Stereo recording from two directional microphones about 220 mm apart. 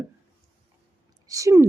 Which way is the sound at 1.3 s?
15° right (ahead or behind).